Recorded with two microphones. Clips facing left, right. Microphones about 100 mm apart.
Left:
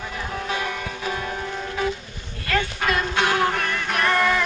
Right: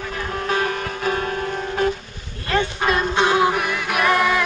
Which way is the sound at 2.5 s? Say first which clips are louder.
Right 3 dB; 25° right (ahead or behind).